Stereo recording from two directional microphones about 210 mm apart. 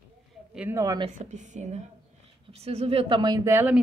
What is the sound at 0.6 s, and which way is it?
Speech, 15° right (ahead or behind).